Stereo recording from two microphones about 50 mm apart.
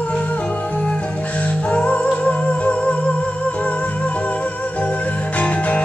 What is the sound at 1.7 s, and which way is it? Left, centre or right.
Music, left.